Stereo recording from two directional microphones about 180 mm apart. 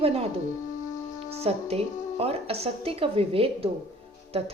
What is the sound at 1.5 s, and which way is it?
A woman's voice, 35° right (ahead or behind).